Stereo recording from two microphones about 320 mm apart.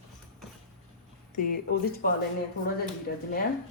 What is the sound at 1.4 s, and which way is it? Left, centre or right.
Speech, left.